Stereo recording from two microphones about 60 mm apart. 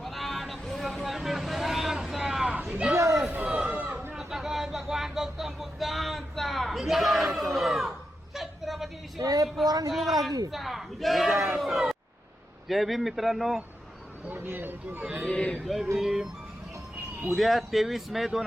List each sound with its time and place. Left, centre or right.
0.0 s vehicle: centre
2.5 s a sound: right
2.9 s chatter: right
3.2 s chatter: right
3.8 s chatter: right
4.1 s vehicle: centre
8.4 s a sound: centre
9.2 s speech: right
9.9 s speech: centre
14.3 s speech: right
15.0 s a man's voice: right
15.3 s a man's voice: centre
15.5 s speech: centre